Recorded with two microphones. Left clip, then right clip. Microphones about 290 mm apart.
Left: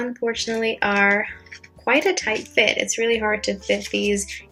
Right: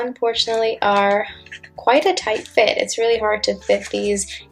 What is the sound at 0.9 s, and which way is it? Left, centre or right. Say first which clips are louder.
A woman's voice: right 2 dB; right.